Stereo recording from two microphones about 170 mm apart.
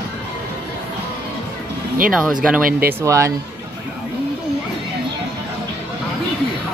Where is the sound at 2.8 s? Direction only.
15° right (ahead or behind).